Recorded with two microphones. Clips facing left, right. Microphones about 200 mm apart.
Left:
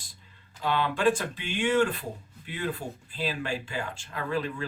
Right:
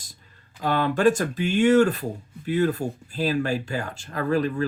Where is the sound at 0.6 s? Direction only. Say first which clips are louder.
Right 5 dB; 45° right (ahead or behind).